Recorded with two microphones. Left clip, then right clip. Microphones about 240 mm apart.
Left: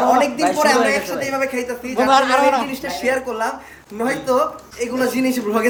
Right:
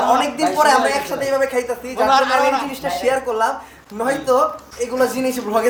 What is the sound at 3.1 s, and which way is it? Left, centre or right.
A man's voice, centre.